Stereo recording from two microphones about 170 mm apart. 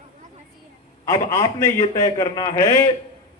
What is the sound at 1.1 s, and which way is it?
A man's voice, 15° left (ahead or behind).